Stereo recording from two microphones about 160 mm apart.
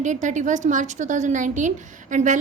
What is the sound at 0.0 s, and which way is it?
A woman's voice, 50° right (ahead or behind).